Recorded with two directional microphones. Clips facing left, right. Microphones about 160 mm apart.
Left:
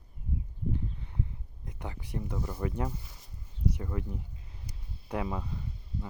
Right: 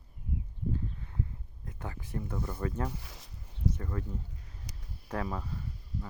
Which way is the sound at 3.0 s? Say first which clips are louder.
Right 3 dB; 80° right.